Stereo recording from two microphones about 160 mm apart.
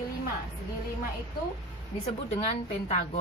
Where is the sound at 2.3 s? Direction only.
45° left (ahead or behind).